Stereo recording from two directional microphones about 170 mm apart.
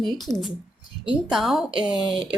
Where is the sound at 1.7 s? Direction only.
30° right (ahead or behind).